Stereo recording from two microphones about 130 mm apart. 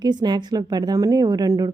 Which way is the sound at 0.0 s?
35° right (ahead or behind).